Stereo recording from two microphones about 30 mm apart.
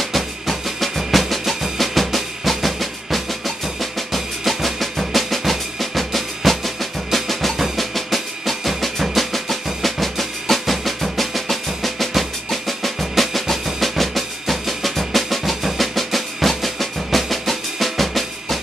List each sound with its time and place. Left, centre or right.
0.0 s music: centre
1.8 s percussion: centre
3.6 s drum: centre